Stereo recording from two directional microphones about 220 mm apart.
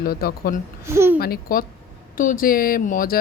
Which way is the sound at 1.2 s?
40° left (ahead or behind).